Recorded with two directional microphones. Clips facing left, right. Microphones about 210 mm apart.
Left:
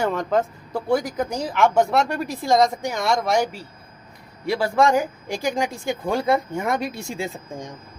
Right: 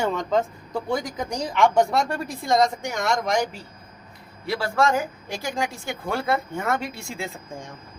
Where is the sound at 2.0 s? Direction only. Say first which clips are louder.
Left 2 dB; 30° right (ahead or behind).